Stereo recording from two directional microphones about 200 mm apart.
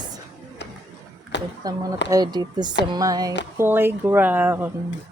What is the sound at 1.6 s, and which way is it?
A woman's voice, 20° right (ahead or behind).